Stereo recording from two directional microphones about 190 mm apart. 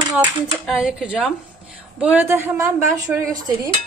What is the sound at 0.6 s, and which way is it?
Speech, 5° right (ahead or behind).